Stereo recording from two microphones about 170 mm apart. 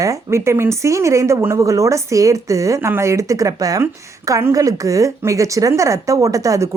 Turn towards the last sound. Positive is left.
turn(degrees=-20)  # may be behind; listen again after turning